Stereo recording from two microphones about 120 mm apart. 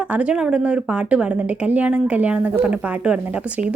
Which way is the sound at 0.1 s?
10° right (ahead or behind).